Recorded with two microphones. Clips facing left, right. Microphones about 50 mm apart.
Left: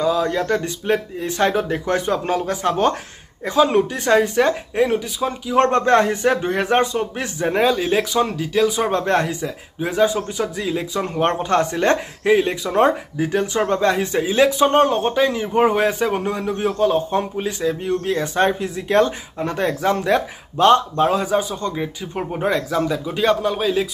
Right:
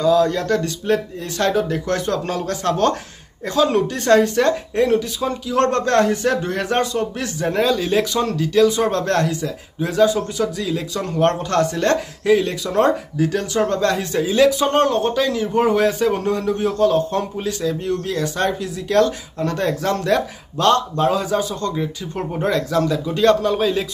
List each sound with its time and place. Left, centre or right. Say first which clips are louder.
0.0 s speech: right 3 dB; centre